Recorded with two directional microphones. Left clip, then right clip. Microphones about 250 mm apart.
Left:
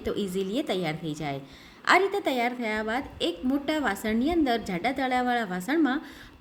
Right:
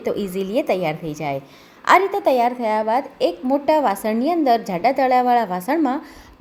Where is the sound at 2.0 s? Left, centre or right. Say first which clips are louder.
Right 8 dB; centre.